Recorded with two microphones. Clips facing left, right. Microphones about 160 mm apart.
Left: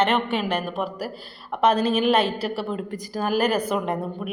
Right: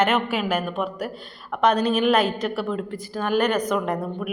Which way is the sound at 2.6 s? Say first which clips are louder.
Right 1 dB; 35° left (ahead or behind).